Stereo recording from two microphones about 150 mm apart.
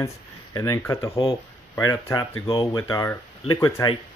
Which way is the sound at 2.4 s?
35° left (ahead or behind).